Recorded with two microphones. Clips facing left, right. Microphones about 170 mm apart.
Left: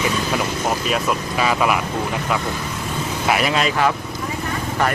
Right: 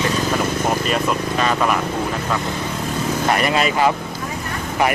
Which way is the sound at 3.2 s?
5° left (ahead or behind).